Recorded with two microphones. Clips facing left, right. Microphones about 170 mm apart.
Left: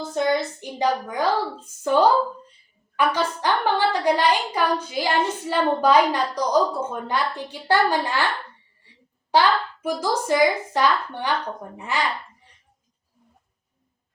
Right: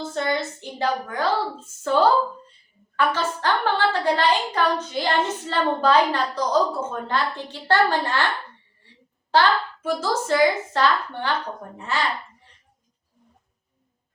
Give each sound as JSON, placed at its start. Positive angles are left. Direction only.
{"t": 0.1, "sound": "a woman's voice", "side_deg": 15}
{"t": 9.3, "sound": "a woman's voice", "side_deg": 15}